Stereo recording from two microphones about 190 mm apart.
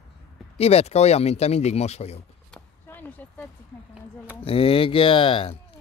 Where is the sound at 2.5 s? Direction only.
10° left (ahead or behind).